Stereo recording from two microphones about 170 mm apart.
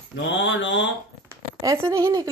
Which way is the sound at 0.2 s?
90° left.